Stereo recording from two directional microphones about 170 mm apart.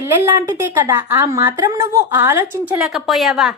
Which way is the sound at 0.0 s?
15° right (ahead or behind).